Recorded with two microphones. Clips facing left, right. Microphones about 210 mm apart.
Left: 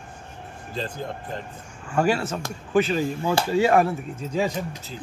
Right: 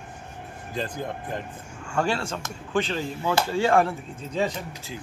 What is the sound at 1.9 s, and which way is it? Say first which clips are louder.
Speech: left 4 dB; 10° left (ahead or behind).